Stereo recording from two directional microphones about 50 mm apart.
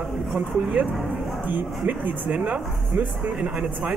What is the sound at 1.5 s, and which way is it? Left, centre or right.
Speech, right.